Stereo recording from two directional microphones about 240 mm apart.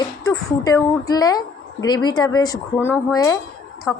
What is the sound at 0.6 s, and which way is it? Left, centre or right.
A woman's voice, centre.